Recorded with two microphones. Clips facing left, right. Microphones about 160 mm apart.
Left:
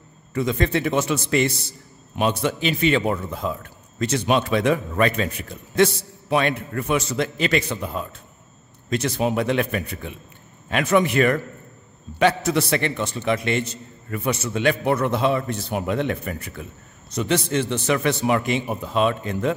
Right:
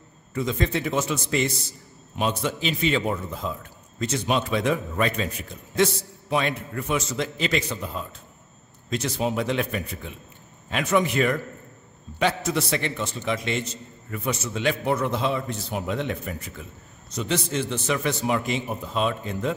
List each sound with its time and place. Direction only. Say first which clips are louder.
0.3 s a man's voice: left 4 dB; 65° left (ahead or behind)
6.3 s a man's voice: left 4 dB; 60° left (ahead or behind)